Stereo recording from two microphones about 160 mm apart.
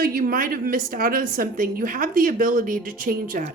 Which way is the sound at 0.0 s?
65° right (ahead or behind).